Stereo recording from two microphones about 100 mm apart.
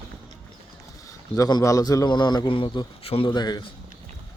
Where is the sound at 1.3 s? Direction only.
35° left (ahead or behind); by 3.3 s 70° left (ahead or behind).